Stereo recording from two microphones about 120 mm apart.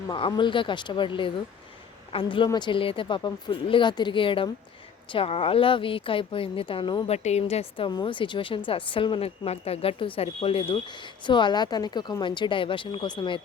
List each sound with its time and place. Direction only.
0.1 s a woman's voice: 40° left (ahead or behind)
7.1 s a woman's voice: 65° left (ahead or behind)
7.9 s speech: 40° left (ahead or behind)